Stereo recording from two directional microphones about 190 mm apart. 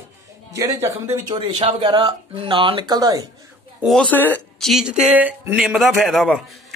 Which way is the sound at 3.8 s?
5° left (ahead or behind).